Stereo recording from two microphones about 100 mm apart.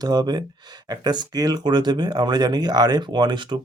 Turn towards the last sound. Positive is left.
turn(degrees=-50)  # may be behind; listen again after turning